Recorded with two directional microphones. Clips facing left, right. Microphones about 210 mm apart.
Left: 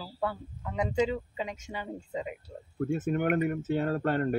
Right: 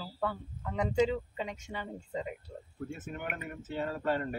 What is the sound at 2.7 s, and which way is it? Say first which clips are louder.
Speech: left 12 dB; 55° left (ahead or behind).